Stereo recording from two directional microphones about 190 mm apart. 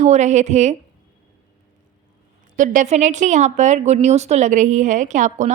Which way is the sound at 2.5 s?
40° right (ahead or behind).